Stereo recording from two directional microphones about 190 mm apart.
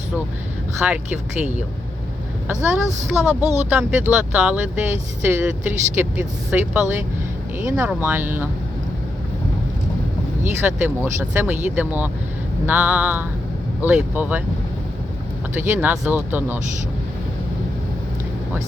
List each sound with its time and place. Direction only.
0.8 s speech: 10° right (ahead or behind)
2.5 s speech: 5° right (ahead or behind)
10.6 s speech: 10° right (ahead or behind)
15.5 s speech: 10° right (ahead or behind)